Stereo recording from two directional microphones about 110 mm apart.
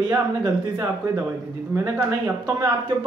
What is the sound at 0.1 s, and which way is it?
Speech, 30° right (ahead or behind).